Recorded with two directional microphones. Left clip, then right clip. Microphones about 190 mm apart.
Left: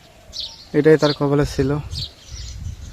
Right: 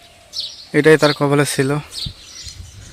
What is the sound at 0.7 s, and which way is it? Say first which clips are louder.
Speech: right 3 dB; 5° right (ahead or behind).